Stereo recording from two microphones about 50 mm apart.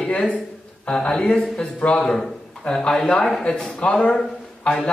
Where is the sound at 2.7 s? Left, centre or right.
Centre.